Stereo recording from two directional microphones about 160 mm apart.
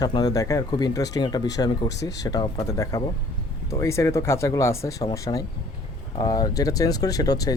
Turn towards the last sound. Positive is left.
turn(degrees=25)  # may be behind; listen again after turning